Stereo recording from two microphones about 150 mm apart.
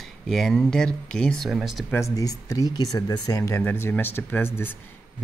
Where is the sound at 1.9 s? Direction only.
20° left (ahead or behind).